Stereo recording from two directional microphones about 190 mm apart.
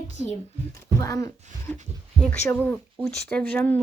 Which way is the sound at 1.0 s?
20° left (ahead or behind).